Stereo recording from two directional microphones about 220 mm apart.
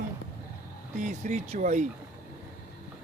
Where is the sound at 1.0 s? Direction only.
35° right (ahead or behind).